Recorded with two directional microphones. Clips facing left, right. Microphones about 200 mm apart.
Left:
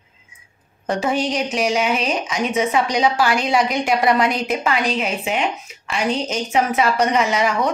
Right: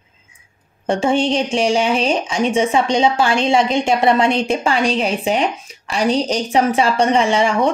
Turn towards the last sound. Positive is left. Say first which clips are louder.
# right 4 dB
turn(degrees=-30)  # may be behind; listen again after turning